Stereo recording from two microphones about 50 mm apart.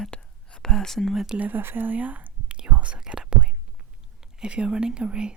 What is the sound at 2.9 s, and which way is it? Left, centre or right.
Whispering, centre.